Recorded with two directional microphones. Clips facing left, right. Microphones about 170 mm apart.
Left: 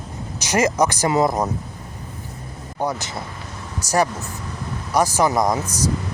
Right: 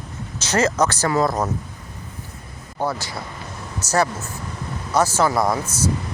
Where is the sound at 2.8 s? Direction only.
20° left (ahead or behind).